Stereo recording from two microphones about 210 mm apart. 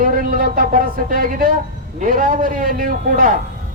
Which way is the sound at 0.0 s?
45° right (ahead or behind).